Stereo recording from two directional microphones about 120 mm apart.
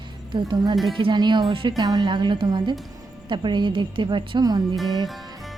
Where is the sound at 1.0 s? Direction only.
40° right (ahead or behind).